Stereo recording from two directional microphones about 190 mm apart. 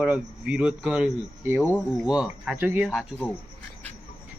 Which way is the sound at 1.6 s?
10° left (ahead or behind).